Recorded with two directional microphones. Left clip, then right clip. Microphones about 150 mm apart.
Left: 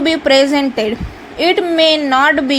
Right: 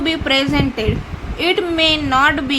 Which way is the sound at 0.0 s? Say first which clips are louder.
Left 6 dB; 35° left (ahead or behind).